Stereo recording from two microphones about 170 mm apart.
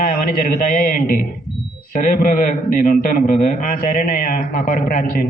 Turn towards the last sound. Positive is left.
turn(degrees=55)  # may be behind; listen again after turning